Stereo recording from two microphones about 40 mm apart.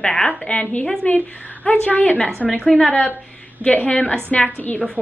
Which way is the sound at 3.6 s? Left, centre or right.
Left.